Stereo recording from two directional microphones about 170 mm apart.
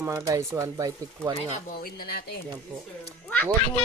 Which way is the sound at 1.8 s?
60° left (ahead or behind).